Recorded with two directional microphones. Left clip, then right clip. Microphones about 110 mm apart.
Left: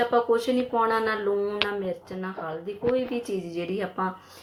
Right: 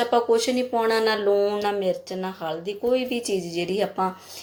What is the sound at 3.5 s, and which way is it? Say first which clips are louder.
Speech: right 5 dB; 25° right (ahead or behind).